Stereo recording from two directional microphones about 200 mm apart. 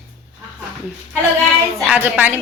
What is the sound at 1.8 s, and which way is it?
Speech, 5° right (ahead or behind).